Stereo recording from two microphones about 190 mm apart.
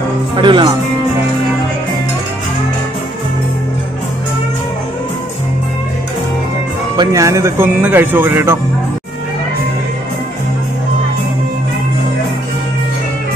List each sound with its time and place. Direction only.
0.4 s speech: 25° right (ahead or behind)
7.0 s speech: 15° right (ahead or behind)